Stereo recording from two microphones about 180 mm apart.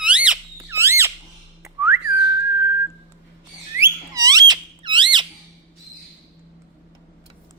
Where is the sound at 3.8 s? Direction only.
20° right (ahead or behind).